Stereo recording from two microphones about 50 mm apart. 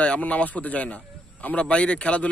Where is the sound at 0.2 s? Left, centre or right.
Left.